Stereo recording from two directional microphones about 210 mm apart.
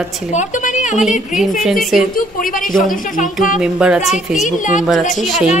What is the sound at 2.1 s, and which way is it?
Speech, 40° left (ahead or behind).